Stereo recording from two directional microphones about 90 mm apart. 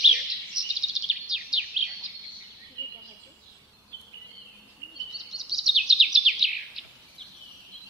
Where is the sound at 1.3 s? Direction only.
10° right (ahead or behind).